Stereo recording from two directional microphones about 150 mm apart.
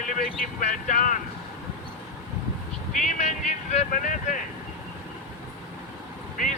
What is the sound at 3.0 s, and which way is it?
Music, 50° left (ahead or behind).